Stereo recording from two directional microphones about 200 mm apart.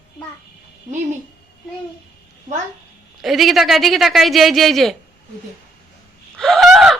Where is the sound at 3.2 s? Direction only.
Centre (ahead or behind).